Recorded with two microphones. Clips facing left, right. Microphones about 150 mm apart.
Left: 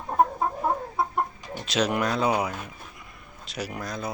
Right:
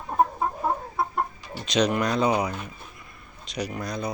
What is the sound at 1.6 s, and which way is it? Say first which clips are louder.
Speech: right 2 dB; 5° left (ahead or behind).